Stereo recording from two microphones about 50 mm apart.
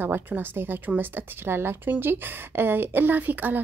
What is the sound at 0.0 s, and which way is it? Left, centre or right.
A woman's voice, right.